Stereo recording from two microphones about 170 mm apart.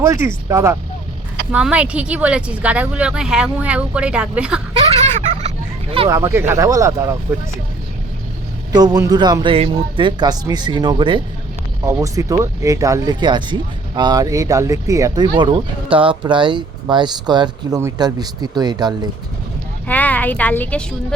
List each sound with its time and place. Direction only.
0.0 s speech: 15° right (ahead or behind)
1.5 s speech: 5° right (ahead or behind)
6.1 s speech: 20° right (ahead or behind)
8.7 s speech: 25° right (ahead or behind)
11.9 s speech: 20° right (ahead or behind)
19.9 s a woman's voice: 10° left (ahead or behind)